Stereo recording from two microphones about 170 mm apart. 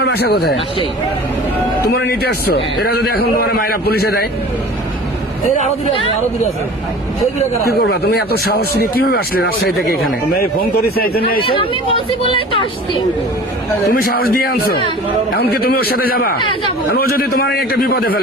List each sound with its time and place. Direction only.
0.0 s speech: 70° left (ahead or behind)
1.9 s speech: 70° left (ahead or behind)
7.7 s speech: 70° left (ahead or behind)
11.3 s speech: 30° left (ahead or behind)
13.9 s speech: 60° left (ahead or behind)